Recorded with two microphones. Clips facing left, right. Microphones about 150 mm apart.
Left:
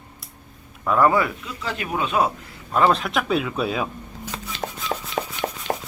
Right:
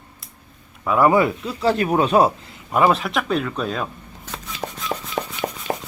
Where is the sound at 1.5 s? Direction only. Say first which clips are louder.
Right 10 dB; 35° right (ahead or behind).